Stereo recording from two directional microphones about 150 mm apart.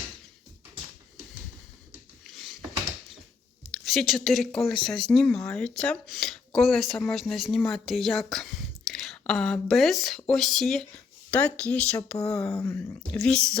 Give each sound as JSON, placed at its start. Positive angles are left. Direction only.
{"t": 2.2, "sound": "a sound", "side_deg": 0}
{"t": 3.7, "sound": "speech", "side_deg": 0}
{"t": 12.5, "sound": "speech", "side_deg": 15}
{"t": 13.1, "sound": "speech", "side_deg": 5}